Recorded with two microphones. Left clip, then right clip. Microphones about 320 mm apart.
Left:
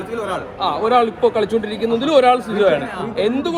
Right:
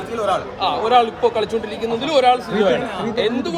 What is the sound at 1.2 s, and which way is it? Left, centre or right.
Speech, centre.